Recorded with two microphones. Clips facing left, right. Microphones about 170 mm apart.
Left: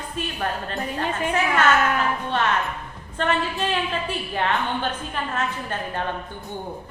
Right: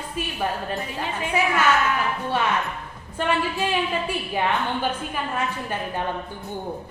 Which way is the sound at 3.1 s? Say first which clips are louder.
Even; 10° right (ahead or behind).